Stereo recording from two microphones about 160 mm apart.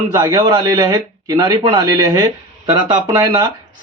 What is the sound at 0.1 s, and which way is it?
Speech, 20° right (ahead or behind).